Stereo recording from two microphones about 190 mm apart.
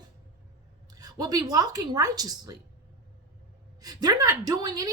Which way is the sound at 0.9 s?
20° right (ahead or behind).